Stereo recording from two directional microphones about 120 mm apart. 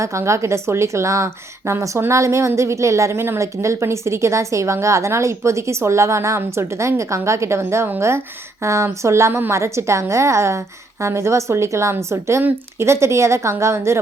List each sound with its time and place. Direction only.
0.0 s a woman's voice: 25° right (ahead or behind)